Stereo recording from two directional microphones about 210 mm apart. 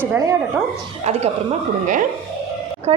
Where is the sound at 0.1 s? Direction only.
10° right (ahead or behind).